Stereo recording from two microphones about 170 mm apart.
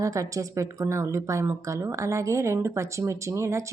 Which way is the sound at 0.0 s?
20° right (ahead or behind).